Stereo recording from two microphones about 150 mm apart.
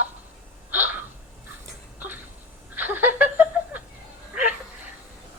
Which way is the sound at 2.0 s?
10° right (ahead or behind).